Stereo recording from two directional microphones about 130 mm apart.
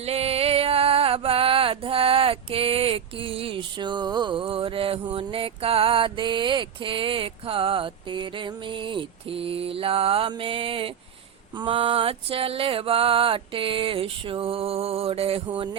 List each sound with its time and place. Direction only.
0.0 s music: 50° right (ahead or behind)
15.4 s music: 40° right (ahead or behind)